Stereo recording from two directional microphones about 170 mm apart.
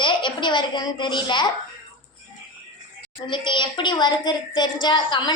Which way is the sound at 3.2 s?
30° left (ahead or behind).